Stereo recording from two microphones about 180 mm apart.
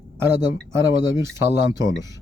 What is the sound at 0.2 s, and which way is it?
Speech, 15° right (ahead or behind).